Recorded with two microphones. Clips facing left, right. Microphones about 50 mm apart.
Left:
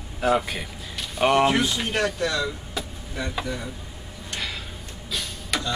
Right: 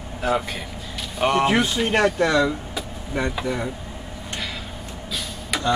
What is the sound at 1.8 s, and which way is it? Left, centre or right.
Speech, right.